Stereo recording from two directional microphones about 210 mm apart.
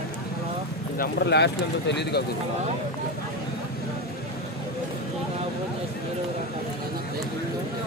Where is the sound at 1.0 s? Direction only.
50° left (ahead or behind).